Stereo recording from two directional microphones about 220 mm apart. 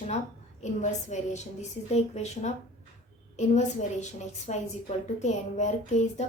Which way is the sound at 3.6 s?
30° left (ahead or behind).